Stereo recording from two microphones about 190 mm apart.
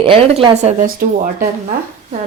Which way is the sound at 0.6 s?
45° right (ahead or behind).